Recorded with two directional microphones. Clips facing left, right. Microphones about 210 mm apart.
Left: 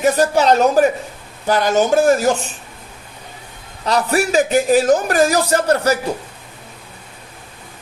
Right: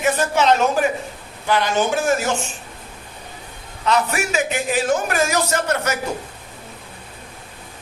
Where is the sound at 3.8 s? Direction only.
35° left (ahead or behind).